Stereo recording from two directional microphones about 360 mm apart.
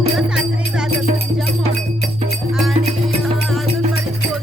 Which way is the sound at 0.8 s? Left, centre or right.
Left.